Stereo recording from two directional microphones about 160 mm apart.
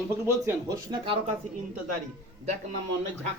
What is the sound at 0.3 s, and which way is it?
Speech, 20° right (ahead or behind).